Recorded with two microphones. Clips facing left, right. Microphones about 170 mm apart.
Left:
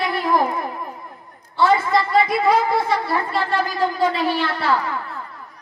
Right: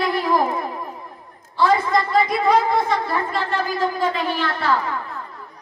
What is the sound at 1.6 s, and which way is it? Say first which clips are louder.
A man's voice: left 1 dB; 5° left (ahead or behind).